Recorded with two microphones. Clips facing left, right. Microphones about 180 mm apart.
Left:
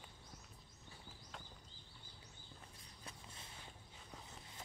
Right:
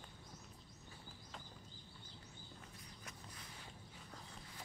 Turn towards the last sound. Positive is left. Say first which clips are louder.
# right 1 dB
turn(degrees=25)  # may be behind; listen again after turning